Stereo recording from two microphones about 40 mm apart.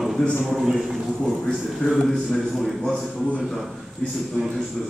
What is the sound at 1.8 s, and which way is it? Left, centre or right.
Speech, left.